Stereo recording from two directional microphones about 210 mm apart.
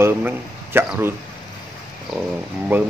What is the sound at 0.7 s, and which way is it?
Speech, 10° right (ahead or behind).